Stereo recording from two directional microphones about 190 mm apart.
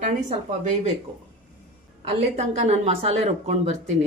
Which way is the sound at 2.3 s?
35° right (ahead or behind).